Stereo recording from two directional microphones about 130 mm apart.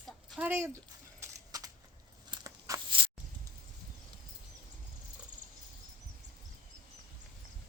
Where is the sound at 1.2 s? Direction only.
30° right (ahead or behind).